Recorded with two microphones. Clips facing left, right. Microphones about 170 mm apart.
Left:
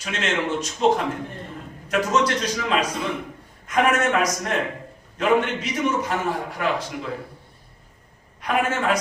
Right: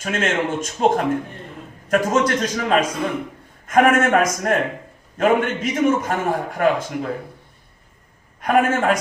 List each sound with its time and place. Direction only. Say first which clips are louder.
0.0 s a man's voice: right 4 dB; 45° right (ahead or behind)
8.4 s a man's voice: right 6 dB; 45° right (ahead or behind)